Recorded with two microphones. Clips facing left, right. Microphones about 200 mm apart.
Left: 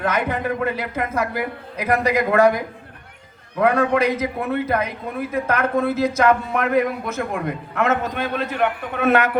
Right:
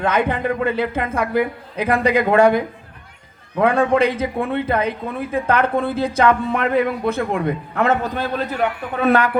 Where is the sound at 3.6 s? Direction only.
30° right (ahead or behind).